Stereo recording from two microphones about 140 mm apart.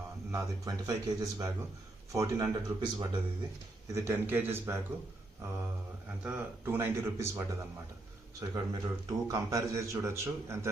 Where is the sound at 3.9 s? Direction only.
15° right (ahead or behind).